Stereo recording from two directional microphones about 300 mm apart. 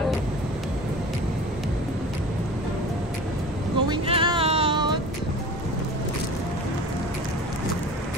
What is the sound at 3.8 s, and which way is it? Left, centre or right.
Music, centre.